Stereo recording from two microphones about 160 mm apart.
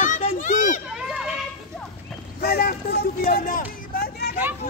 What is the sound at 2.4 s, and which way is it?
Speech, 65° left (ahead or behind).